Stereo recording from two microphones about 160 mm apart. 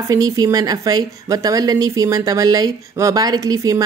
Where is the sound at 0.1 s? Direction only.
20° right (ahead or behind).